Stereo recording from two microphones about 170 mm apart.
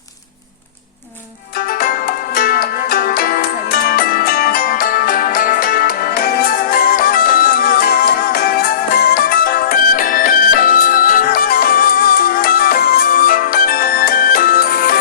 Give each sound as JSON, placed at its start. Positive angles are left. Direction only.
{"t": 1.5, "sound": "music", "side_deg": 60}